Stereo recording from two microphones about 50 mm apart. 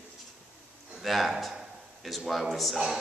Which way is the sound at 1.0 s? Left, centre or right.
Centre.